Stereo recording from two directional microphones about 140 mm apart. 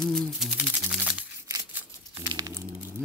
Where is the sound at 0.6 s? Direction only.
10° right (ahead or behind).